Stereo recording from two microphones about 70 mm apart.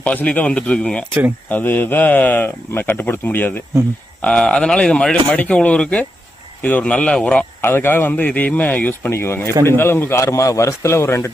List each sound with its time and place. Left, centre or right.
0.0 s speech: left
1.5 s speech: left
4.2 s speech: centre
7.6 s speech: left
9.0 s speech: left